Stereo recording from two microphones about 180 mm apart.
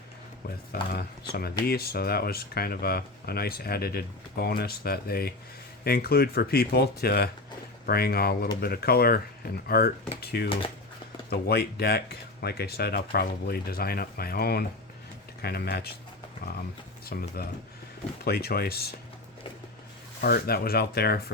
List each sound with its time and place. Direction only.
0.7 s speech: 55° left (ahead or behind)
17.1 s speech: 60° left (ahead or behind)
20.2 s speech: 60° left (ahead or behind)